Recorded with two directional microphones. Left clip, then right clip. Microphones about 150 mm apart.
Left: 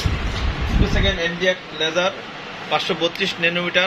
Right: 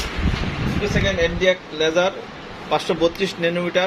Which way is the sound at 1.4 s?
55° right (ahead or behind).